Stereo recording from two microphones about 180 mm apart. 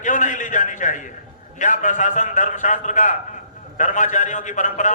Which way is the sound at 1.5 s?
45° left (ahead or behind).